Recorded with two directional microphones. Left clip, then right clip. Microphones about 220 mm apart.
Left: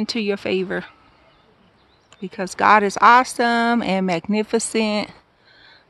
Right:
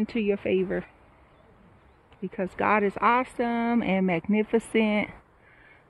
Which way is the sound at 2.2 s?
20° left (ahead or behind).